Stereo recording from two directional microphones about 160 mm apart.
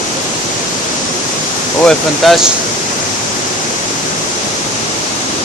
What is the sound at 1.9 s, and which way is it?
Speech, centre (ahead or behind).